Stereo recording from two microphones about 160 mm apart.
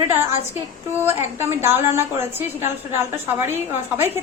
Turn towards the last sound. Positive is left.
turn(degrees=-15)  # may be behind; listen again after turning